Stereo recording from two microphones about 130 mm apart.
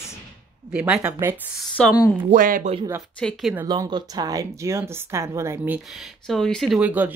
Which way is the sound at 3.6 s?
35° right (ahead or behind).